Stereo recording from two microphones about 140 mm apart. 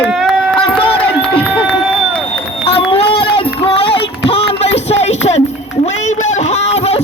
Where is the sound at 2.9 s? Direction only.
40° left (ahead or behind).